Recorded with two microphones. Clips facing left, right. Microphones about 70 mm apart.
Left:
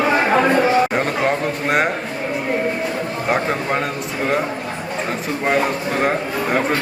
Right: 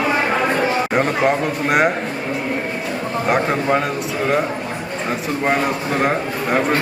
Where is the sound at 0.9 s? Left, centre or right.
Centre.